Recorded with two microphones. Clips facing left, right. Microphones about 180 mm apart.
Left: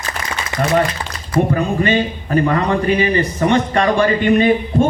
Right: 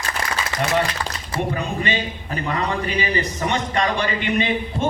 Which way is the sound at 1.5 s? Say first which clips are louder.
Left 8 dB; 50° left (ahead or behind).